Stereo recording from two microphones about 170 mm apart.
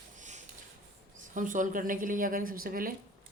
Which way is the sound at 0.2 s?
45° right (ahead or behind).